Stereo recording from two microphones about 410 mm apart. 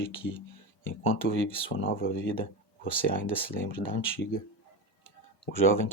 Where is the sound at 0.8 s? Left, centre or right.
Left; by 3.8 s centre.